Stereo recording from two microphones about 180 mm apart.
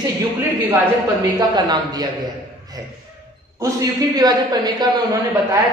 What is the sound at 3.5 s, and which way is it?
A man's voice, 20° right (ahead or behind).